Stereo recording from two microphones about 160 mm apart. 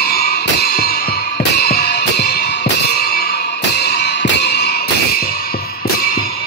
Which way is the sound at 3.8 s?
90° left.